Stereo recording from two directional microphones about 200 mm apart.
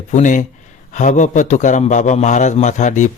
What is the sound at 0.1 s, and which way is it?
A man's voice, 40° left (ahead or behind).